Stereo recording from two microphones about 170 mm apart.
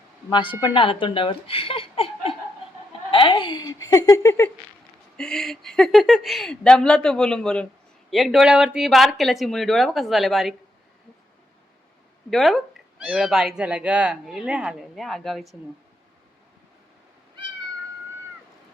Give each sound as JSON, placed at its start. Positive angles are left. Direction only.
{"t": 0.3, "sound": "speech", "side_deg": 25}
{"t": 5.1, "sound": "speech", "side_deg": 5}
{"t": 12.3, "sound": "speech", "side_deg": 0}